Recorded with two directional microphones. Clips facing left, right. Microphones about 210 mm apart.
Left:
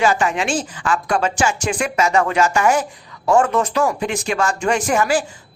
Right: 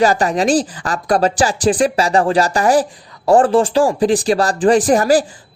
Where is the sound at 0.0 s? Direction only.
35° right (ahead or behind).